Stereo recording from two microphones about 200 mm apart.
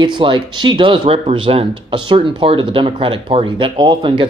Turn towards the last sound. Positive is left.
turn(degrees=-25)  # may be behind; listen again after turning